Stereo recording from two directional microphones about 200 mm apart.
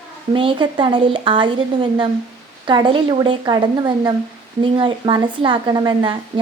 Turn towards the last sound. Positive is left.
turn(degrees=-25)  # may be behind; listen again after turning